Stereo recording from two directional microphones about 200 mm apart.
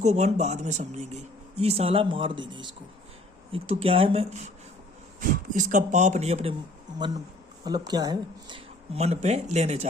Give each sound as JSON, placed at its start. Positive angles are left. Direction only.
{"t": 0.0, "sound": "speech", "side_deg": -35}
{"t": 5.5, "sound": "speech", "side_deg": -40}
{"t": 7.6, "sound": "speech", "side_deg": -20}